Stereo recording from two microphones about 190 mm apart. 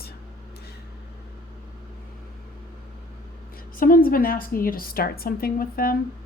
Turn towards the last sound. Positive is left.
turn(degrees=50)  # may be behind; listen again after turning